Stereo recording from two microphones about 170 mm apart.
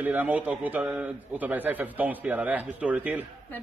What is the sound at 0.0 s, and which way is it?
A man's voice, 10° right (ahead or behind).